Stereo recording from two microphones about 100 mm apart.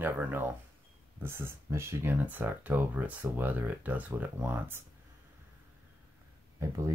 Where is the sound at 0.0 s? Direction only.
20° right (ahead or behind).